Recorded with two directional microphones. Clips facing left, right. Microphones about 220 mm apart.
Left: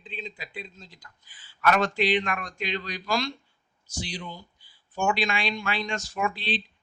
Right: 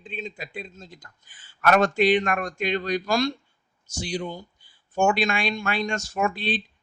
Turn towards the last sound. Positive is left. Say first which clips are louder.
# right 4 dB
turn(degrees=-50)  # may be behind; listen again after turning